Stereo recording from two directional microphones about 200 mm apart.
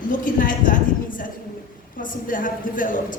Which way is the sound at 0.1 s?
40° left (ahead or behind).